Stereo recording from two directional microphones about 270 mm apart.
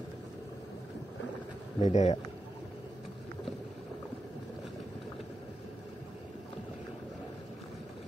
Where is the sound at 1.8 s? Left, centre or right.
Left.